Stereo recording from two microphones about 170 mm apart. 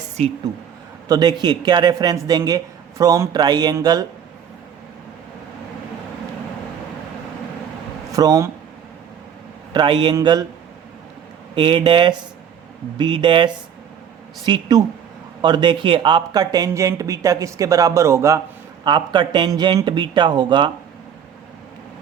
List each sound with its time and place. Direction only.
0.2 s speech: 40° right (ahead or behind)
1.0 s speech: 20° right (ahead or behind)
8.1 s speech: 20° right (ahead or behind)
9.7 s speech: 25° right (ahead or behind)
11.5 s speech: 30° right (ahead or behind)